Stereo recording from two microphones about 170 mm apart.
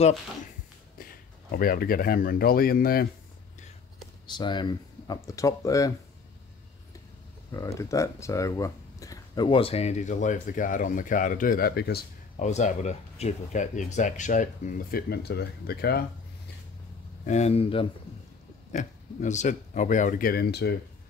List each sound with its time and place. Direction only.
1.5 s speech: 60° left (ahead or behind)
4.3 s speech: 25° left (ahead or behind)
7.5 s speech: 20° left (ahead or behind); by 12.0 s 70° left (ahead or behind)
12.4 s speech: 45° left (ahead or behind); by 16.0 s 65° left (ahead or behind)
17.3 s speech: 40° left (ahead or behind)
18.7 s speech: 45° left (ahead or behind); by 20.7 s 65° left (ahead or behind)